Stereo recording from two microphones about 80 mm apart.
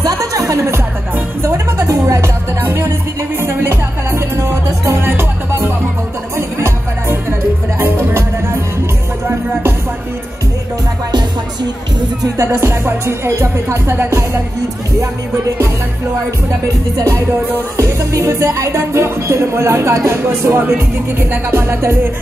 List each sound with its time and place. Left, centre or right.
0.0 s music: right
12.4 s speech: right
17.7 s speech: right